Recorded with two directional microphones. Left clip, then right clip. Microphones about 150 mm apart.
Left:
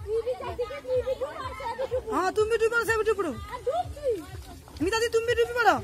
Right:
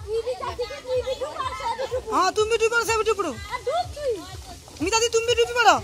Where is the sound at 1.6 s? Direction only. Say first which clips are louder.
Even; 80° left.